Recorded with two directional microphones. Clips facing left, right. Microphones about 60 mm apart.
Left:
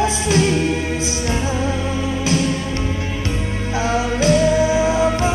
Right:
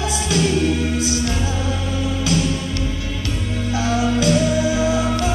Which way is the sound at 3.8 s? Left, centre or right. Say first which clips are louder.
Left 1 dB; left.